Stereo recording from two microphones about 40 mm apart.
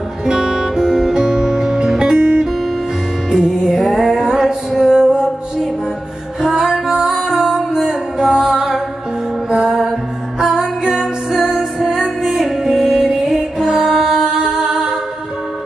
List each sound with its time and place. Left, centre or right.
0.3 s music: centre
13.7 s mantra: centre
14.3 s music: centre